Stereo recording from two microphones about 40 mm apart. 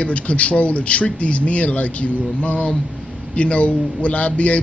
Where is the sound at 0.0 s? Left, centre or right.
Left.